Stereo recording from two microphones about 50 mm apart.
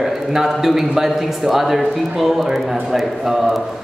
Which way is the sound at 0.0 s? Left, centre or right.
Centre.